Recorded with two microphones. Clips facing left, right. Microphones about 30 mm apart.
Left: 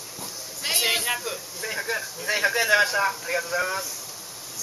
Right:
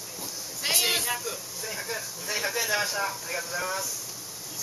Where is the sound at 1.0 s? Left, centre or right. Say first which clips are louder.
Left 4 dB; left.